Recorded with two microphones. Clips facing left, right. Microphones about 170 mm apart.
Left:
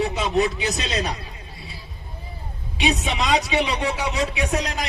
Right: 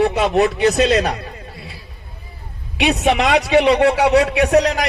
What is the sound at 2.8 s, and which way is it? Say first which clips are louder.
A man's voice: right 7 dB; 60° right (ahead or behind).